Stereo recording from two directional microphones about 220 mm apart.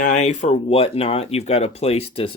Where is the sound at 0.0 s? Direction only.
30° left (ahead or behind).